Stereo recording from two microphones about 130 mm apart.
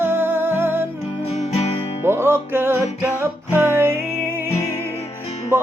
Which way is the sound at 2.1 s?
20° right (ahead or behind).